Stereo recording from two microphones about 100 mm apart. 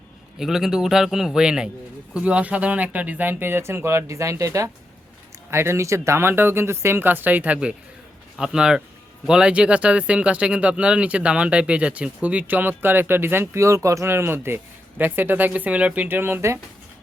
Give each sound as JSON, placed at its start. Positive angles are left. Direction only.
{"t": 0.3, "sound": "a man's voice", "side_deg": -5}